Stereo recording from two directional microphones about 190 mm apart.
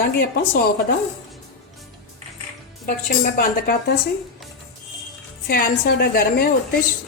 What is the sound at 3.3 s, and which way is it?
Speech, 50° left (ahead or behind).